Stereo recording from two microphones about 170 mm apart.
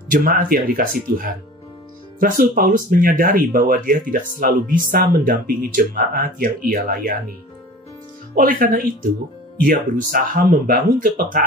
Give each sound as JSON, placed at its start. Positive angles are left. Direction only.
{"t": 0.1, "sound": "speech", "side_deg": -50}
{"t": 8.4, "sound": "speech", "side_deg": -55}